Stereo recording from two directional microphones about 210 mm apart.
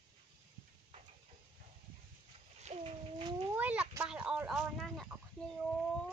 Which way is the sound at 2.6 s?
30° right (ahead or behind).